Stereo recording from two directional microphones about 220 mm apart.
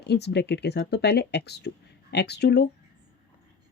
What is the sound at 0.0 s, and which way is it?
Speech, 50° left (ahead or behind).